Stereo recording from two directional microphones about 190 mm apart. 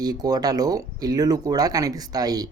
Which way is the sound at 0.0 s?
20° right (ahead or behind).